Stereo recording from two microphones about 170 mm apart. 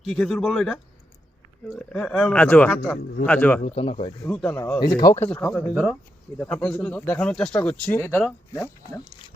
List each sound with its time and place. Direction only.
0.0 s speech: centre (ahead or behind)
3.6 s speech: 35° left (ahead or behind)
4.3 s speech: 5° left (ahead or behind)
4.8 s speech: 20° left (ahead or behind)